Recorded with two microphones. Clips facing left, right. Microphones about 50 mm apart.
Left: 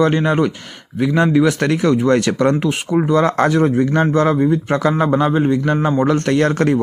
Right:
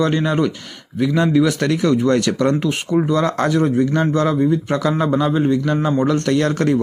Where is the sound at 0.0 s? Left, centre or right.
Left.